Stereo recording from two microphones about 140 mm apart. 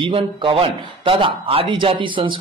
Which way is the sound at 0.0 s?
40° right (ahead or behind).